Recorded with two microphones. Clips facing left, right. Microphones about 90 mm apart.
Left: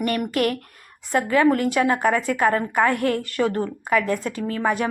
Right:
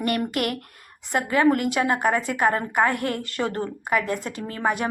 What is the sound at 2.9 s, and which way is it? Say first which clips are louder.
Speech: left 5 dB; 50° left (ahead or behind).